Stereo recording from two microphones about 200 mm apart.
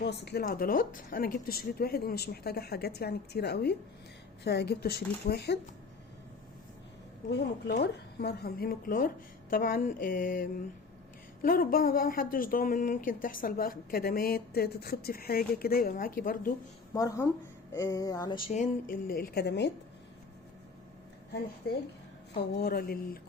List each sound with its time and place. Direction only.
0.0 s a woman's voice: 55° left (ahead or behind)
7.3 s a woman's voice: 55° left (ahead or behind)
16.9 s a sound: 15° left (ahead or behind)
18.5 s a woman's voice: 40° left (ahead or behind); by 19.7 s 55° left (ahead or behind)
21.7 s a woman's voice: 55° left (ahead or behind)